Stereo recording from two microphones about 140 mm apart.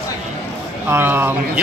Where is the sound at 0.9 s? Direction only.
15° right (ahead or behind).